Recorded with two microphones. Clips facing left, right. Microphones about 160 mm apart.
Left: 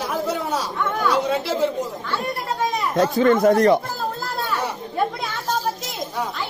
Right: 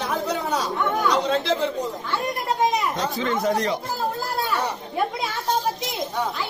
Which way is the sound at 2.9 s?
55° left (ahead or behind).